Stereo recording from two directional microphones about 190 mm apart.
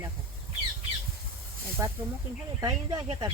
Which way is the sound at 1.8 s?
15° right (ahead or behind).